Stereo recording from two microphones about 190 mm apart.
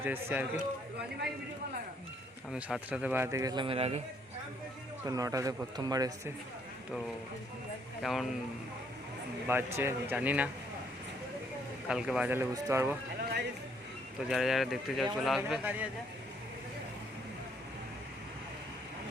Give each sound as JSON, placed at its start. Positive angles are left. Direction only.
{"t": 0.0, "sound": "speech", "side_deg": -10}
{"t": 2.5, "sound": "speech", "side_deg": -5}
{"t": 5.0, "sound": "speech", "side_deg": -20}
{"t": 8.0, "sound": "speech", "side_deg": 0}
{"t": 9.5, "sound": "speech", "side_deg": -10}
{"t": 11.9, "sound": "speech", "side_deg": -5}
{"t": 14.3, "sound": "speech", "side_deg": 0}